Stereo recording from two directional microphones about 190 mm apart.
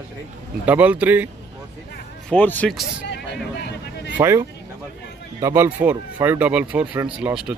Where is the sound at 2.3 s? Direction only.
10° left (ahead or behind).